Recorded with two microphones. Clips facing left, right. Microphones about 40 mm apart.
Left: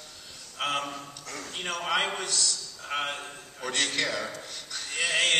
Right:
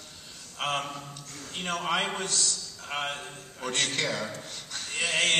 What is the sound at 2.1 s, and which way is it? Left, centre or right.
Speech, right.